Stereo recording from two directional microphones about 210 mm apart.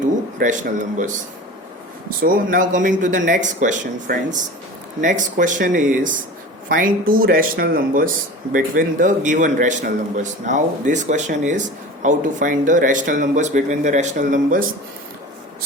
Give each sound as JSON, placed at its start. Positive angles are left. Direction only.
{"t": 0.3, "sound": "a man's voice", "side_deg": -35}